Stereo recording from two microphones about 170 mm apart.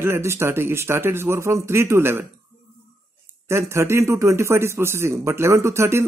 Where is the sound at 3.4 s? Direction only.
15° right (ahead or behind).